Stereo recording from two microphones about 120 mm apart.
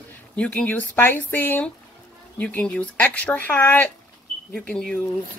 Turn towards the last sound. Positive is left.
turn(degrees=10)  # may be behind; listen again after turning